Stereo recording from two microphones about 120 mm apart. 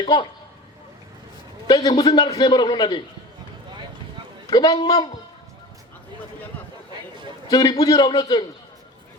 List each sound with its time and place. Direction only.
0.0 s a man's voice: 40° left (ahead or behind)
1.6 s a man's voice: 35° left (ahead or behind)
4.4 s a man's voice: 35° left (ahead or behind)
7.5 s a man's voice: 35° left (ahead or behind)